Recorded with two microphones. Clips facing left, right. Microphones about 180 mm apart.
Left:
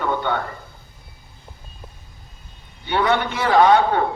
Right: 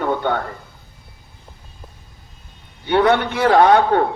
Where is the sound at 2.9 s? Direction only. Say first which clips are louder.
Right 4 dB; 55° right (ahead or behind).